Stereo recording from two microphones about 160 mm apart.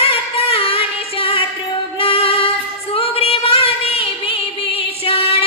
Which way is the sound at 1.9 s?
35° left (ahead or behind).